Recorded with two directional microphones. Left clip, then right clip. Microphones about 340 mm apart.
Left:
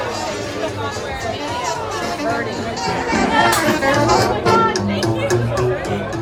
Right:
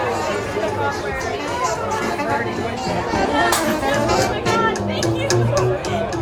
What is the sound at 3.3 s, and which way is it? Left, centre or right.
Music, left.